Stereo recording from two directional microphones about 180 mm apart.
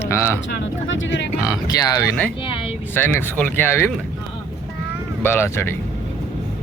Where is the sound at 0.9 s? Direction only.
90° left.